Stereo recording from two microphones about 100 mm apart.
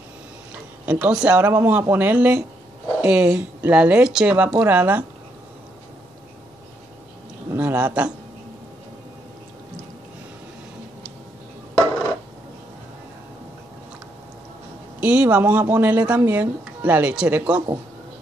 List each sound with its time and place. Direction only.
0.8 s speech: 15° right (ahead or behind)
7.5 s a man's voice: 15° right (ahead or behind)
15.0 s speech: 15° right (ahead or behind)